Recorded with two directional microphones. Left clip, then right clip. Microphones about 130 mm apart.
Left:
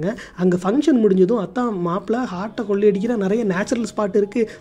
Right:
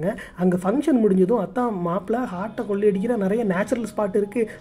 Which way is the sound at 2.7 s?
50° left (ahead or behind).